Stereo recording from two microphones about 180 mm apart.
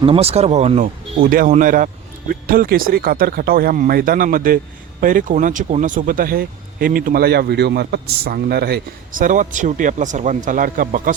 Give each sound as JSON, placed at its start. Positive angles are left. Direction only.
{"t": 0.0, "sound": "speech", "side_deg": -35}
{"t": 1.2, "sound": "speech", "side_deg": -50}